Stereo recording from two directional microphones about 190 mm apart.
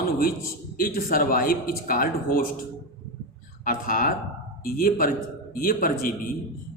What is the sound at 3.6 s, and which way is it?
A man's voice, 45° left (ahead or behind).